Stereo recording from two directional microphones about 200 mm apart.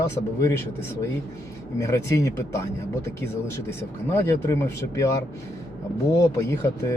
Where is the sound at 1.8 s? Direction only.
15° left (ahead or behind).